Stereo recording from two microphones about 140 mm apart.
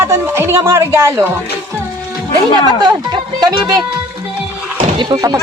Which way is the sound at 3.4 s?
30° right (ahead or behind).